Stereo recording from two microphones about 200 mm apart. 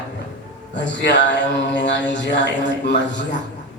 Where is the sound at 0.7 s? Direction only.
60° left (ahead or behind).